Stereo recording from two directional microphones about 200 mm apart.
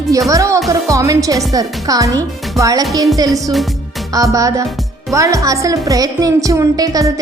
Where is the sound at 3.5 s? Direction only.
Centre (ahead or behind).